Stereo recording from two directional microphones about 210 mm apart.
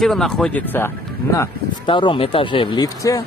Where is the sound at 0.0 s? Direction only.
Centre (ahead or behind).